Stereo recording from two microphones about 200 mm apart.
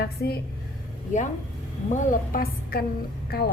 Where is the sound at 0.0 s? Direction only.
50° left (ahead or behind).